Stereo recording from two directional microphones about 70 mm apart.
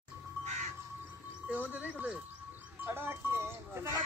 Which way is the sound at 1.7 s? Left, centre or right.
Right.